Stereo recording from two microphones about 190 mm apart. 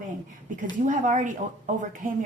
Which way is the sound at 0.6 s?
40° right (ahead or behind).